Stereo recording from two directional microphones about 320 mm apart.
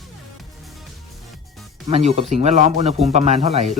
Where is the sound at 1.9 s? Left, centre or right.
Right.